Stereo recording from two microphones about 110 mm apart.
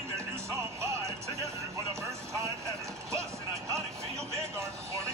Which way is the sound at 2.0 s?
25° right (ahead or behind).